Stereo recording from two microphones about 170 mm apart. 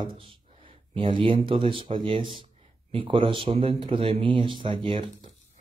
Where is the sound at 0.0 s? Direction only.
30° right (ahead or behind).